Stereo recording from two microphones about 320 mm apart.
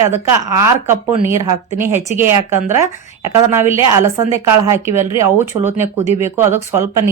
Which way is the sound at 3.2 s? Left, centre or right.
Centre.